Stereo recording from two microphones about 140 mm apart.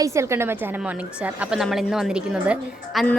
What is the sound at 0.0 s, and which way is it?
Speech, 20° right (ahead or behind).